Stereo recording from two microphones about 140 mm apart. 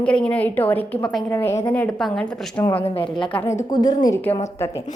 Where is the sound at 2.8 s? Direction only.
45° left (ahead or behind).